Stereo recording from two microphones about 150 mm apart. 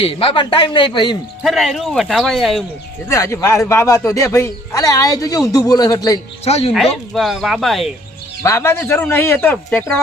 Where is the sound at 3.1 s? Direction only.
20° left (ahead or behind).